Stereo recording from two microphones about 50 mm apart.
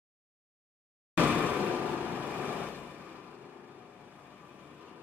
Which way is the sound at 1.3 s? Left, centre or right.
Right.